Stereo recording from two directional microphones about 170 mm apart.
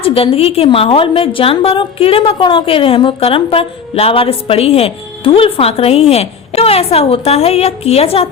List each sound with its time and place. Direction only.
0.0 s a woman's voice: 35° left (ahead or behind)